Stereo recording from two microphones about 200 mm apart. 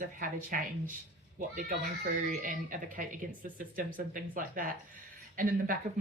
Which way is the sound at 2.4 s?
45° right (ahead or behind).